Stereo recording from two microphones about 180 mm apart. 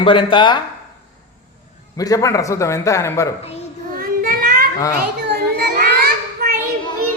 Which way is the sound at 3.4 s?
35° left (ahead or behind).